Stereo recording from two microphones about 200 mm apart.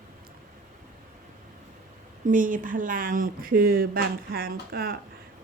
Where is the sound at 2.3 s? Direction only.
40° right (ahead or behind).